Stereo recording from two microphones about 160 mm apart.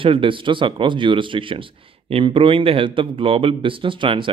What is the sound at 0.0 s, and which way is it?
Speech, 35° right (ahead or behind).